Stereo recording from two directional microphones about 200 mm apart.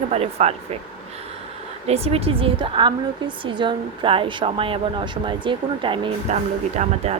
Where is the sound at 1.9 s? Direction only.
30° right (ahead or behind).